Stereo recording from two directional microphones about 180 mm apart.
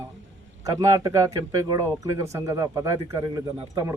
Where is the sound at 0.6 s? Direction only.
20° right (ahead or behind).